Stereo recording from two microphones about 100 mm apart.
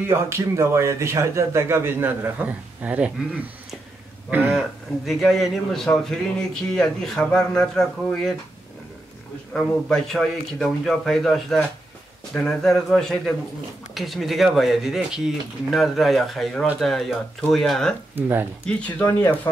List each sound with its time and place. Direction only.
0.1 s a man's voice: 25° right (ahead or behind)
4.5 s a man's voice: centre (ahead or behind)
9.5 s a man's voice: 5° left (ahead or behind)
18.1 s a man's voice: 20° right (ahead or behind)
18.7 s speech: 10° left (ahead or behind)
19.0 s speech: 25° left (ahead or behind)